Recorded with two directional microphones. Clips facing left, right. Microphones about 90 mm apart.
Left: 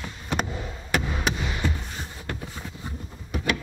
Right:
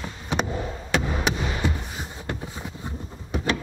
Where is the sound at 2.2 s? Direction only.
20° right (ahead or behind).